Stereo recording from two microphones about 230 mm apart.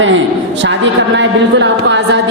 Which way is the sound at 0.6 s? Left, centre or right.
Right.